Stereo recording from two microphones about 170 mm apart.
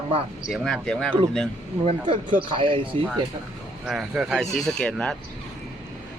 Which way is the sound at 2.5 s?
30° right (ahead or behind).